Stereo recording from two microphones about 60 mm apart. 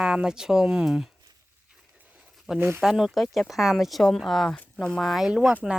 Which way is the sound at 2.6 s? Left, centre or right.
Right.